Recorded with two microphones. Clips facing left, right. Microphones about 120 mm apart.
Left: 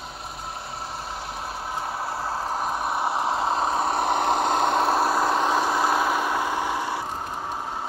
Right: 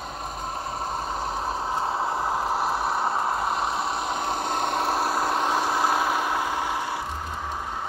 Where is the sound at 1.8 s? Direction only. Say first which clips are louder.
Right 3 dB; 20° right (ahead or behind); by 3.1 s 5° left (ahead or behind).